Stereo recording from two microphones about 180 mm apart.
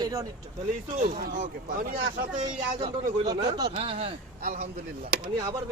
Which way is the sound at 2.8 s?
25° right (ahead or behind).